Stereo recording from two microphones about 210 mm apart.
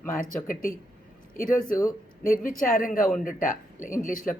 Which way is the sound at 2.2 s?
40° left (ahead or behind).